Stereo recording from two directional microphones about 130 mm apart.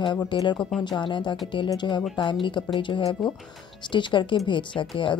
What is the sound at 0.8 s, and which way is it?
Speech, 35° left (ahead or behind).